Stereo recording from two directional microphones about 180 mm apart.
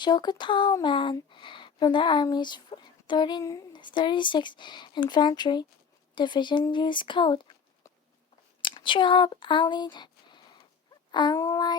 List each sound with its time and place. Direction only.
0.0 s speech: 25° left (ahead or behind)
8.6 s speech: 25° left (ahead or behind)